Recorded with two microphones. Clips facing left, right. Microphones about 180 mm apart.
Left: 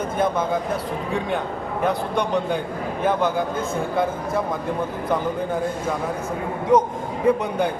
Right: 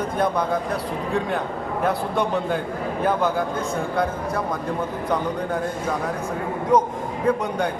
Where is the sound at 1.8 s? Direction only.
Centre (ahead or behind).